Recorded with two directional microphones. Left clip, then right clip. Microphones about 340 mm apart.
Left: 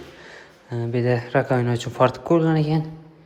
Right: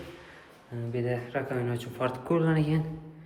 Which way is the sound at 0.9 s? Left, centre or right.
Centre.